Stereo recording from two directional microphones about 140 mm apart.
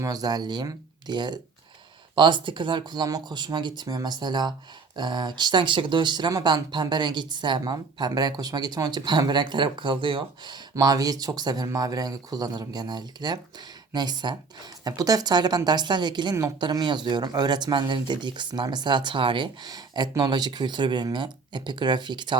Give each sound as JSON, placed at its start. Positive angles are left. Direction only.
{"t": 0.0, "sound": "speech", "side_deg": -25}